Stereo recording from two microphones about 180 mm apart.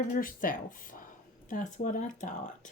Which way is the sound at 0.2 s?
50° left (ahead or behind).